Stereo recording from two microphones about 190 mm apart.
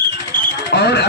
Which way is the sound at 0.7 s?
60° left (ahead or behind).